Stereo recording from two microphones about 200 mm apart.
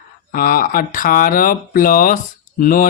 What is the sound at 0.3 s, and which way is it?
Speech, 45° left (ahead or behind).